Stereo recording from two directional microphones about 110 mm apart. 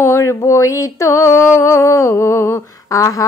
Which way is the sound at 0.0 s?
25° left (ahead or behind).